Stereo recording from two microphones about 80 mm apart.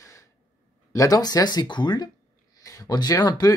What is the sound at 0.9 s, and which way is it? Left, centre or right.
Speech, left.